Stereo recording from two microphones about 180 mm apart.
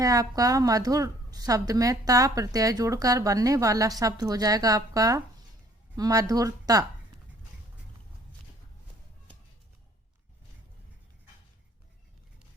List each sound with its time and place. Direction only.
0.0 s a woman's voice: 20° right (ahead or behind)